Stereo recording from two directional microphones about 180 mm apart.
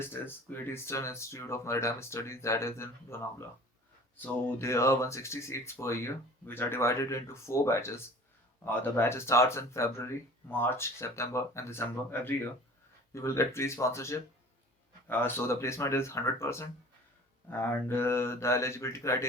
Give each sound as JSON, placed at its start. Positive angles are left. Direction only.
{"t": 0.0, "sound": "speech", "side_deg": 10}
{"t": 4.2, "sound": "speech", "side_deg": 15}